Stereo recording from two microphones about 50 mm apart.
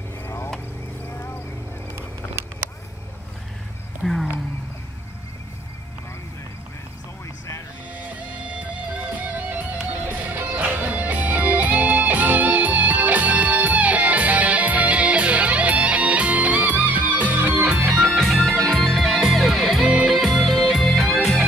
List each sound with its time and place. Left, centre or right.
4.0 s speech: centre
8.0 s music: right
18.0 s music: centre